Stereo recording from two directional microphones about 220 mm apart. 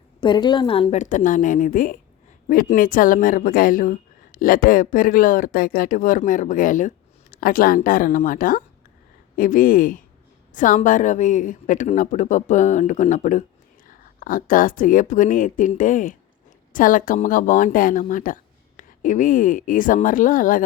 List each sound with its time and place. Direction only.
0.2 s a woman's voice: 20° left (ahead or behind); by 20.6 s 40° left (ahead or behind)